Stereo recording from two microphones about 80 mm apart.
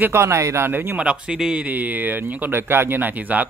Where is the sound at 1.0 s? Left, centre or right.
Centre.